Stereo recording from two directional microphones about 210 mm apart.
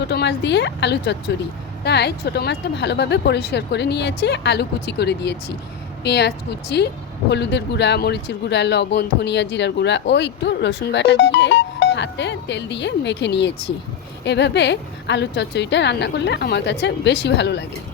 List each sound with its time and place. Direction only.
0.1 s a woman's voice: 55° left (ahead or behind)